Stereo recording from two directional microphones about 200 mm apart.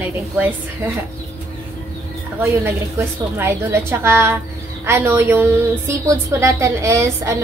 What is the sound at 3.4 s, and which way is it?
A woman's voice, 10° right (ahead or behind).